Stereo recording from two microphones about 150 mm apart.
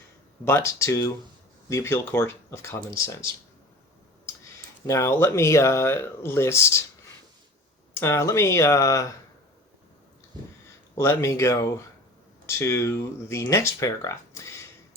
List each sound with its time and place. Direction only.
0.4 s speech: 15° left (ahead or behind)
4.9 s speech: 20° left (ahead or behind)
7.9 s speech: 15° left (ahead or behind)
10.9 s speech: 15° left (ahead or behind)